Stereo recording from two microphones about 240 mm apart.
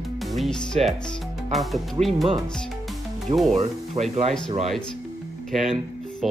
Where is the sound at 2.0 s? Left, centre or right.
Right.